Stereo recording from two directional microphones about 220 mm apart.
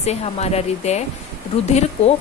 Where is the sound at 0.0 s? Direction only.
30° left (ahead or behind).